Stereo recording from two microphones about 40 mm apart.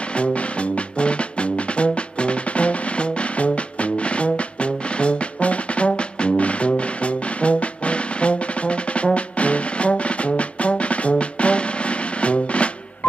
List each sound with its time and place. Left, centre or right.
0.2 s music: left